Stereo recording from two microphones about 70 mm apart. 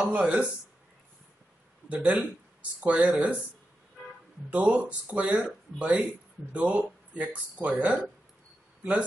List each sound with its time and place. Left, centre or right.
0.0 s speech: centre
1.9 s speech: centre
4.5 s speech: right